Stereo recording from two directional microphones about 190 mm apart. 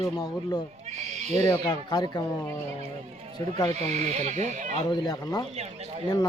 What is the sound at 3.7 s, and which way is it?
Speech, 35° right (ahead or behind).